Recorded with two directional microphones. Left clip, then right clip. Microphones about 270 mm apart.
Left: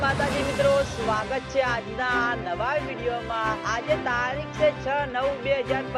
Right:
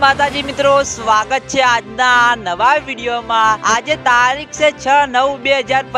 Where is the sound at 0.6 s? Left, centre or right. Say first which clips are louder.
Right 11 dB; right.